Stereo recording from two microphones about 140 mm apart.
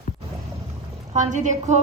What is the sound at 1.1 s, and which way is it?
Speech, 60° right (ahead or behind).